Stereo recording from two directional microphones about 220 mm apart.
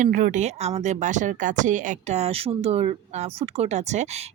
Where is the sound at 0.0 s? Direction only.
35° right (ahead or behind).